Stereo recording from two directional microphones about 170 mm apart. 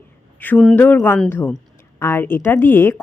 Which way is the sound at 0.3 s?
10° left (ahead or behind).